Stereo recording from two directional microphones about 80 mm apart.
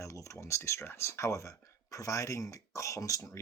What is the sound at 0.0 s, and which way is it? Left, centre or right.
Speech, left.